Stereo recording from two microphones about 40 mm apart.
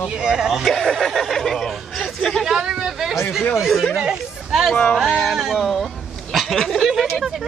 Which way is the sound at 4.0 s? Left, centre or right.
Centre.